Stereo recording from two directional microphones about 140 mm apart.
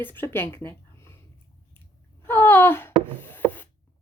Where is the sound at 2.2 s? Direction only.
15° left (ahead or behind).